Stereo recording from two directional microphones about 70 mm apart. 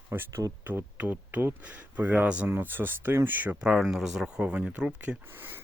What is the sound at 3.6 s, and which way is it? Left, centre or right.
Speech, centre.